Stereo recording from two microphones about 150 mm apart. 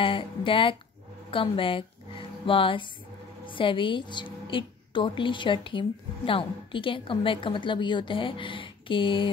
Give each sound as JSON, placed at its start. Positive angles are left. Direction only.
{"t": 0.0, "sound": "a woman's voice", "side_deg": 35}